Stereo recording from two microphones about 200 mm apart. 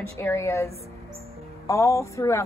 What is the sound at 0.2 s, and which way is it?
A woman's voice, 15° left (ahead or behind).